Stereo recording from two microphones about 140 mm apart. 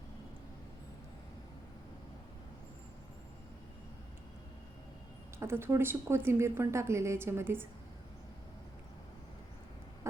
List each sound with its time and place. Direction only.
5.4 s a woman's voice: 15° right (ahead or behind)